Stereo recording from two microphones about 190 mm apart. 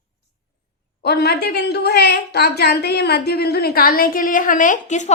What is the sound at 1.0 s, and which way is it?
A woman's voice, 55° left (ahead or behind).